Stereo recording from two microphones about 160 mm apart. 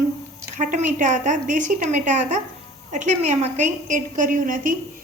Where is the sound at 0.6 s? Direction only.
55° right (ahead or behind).